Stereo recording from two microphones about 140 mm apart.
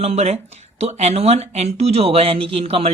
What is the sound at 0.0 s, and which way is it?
Speech, 50° right (ahead or behind).